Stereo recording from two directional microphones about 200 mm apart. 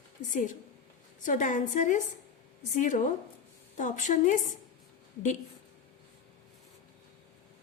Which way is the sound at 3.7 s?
40° left (ahead or behind).